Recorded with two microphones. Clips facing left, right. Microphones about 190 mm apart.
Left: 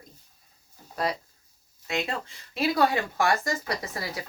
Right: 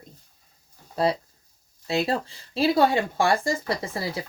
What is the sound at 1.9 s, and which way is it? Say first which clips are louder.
Speech: right 6 dB; 35° right (ahead or behind).